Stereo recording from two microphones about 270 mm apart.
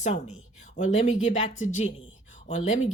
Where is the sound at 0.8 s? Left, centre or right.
Left.